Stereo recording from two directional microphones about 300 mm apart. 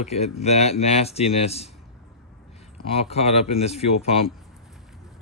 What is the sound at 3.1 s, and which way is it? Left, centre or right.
Speech, left.